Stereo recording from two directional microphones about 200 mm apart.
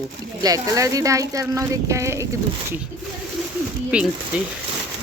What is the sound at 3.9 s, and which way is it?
Speech, 5° right (ahead or behind).